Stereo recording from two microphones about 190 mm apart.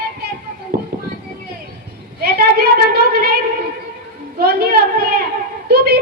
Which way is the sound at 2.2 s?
55° right (ahead or behind).